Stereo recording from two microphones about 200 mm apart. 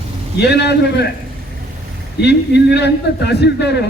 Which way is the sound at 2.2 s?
55° left (ahead or behind).